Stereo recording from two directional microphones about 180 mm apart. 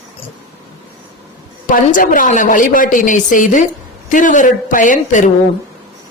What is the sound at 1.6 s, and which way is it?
A woman's voice, 50° left (ahead or behind).